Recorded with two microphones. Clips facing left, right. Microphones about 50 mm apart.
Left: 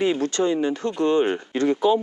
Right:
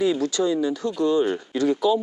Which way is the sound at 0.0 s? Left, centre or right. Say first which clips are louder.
Even; left.